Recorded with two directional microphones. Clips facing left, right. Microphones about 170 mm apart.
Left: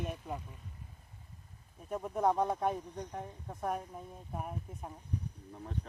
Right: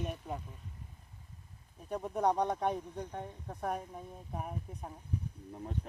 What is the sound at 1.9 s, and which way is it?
Speech, centre (ahead or behind).